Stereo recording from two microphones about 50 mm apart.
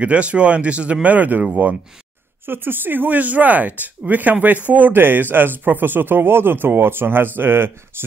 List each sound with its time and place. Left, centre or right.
0.0 s speech: right
2.4 s speech: right